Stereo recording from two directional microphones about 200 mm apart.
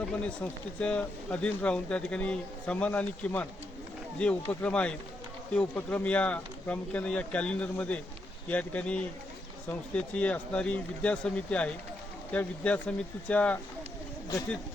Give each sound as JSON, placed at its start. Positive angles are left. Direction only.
{"t": 0.0, "sound": "speech", "side_deg": 5}